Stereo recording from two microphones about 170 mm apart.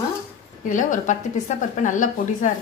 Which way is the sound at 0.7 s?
50° left (ahead or behind).